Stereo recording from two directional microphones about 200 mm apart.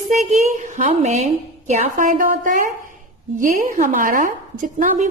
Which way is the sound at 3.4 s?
40° right (ahead or behind).